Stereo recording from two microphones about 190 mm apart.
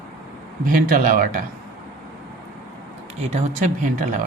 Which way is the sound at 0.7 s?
45° right (ahead or behind).